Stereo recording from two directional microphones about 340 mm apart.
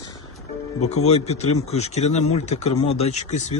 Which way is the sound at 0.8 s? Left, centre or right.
Centre.